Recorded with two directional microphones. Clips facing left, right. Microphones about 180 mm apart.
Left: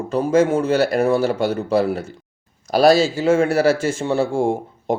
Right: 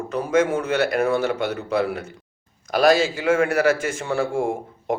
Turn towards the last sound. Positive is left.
turn(degrees=30)  # may be behind; listen again after turning